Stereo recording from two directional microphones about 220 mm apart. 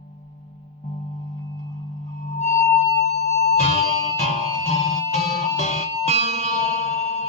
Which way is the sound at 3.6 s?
30° left (ahead or behind).